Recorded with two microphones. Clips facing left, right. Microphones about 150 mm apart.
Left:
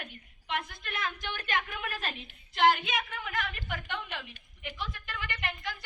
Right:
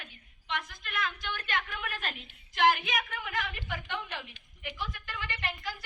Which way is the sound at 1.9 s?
35° left (ahead or behind).